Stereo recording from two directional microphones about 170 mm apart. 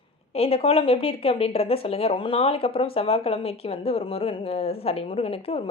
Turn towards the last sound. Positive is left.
turn(degrees=35)  # may be behind; listen again after turning